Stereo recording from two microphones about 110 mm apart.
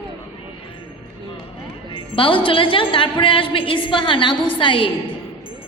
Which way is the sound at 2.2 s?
50° left (ahead or behind).